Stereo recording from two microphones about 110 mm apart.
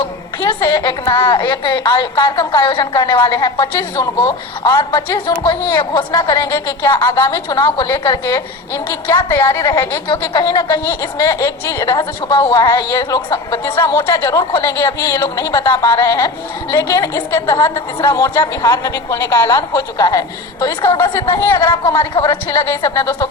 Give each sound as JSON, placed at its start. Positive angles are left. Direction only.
{"t": 0.0, "sound": "a woman's voice", "side_deg": 30}
{"t": 2.8, "sound": "a woman's voice", "side_deg": 35}
{"t": 5.5, "sound": "a woman's voice", "side_deg": 45}
{"t": 6.1, "sound": "a woman's voice", "side_deg": 35}